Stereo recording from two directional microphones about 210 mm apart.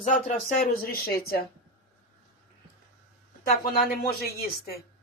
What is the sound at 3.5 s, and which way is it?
Speech, 45° left (ahead or behind).